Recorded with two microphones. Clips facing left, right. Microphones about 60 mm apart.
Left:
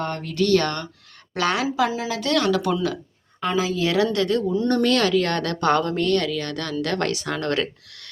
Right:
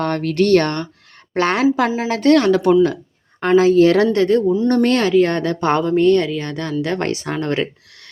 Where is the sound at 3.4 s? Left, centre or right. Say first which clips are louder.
Right 11 dB; right.